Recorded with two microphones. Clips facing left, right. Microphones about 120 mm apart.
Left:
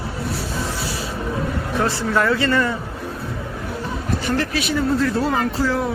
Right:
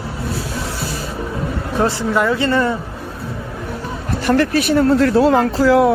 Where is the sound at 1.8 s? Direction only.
15° right (ahead or behind).